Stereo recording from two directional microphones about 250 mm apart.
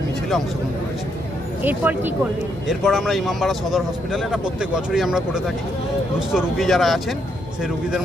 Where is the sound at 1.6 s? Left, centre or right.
Centre.